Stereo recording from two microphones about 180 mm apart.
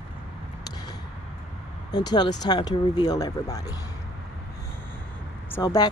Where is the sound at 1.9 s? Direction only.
20° left (ahead or behind).